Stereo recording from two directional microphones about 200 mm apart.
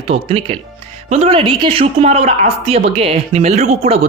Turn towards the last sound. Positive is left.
turn(degrees=-35)  # may be behind; listen again after turning